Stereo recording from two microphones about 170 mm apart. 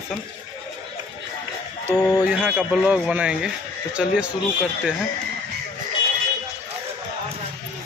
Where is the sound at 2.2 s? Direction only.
5° right (ahead or behind).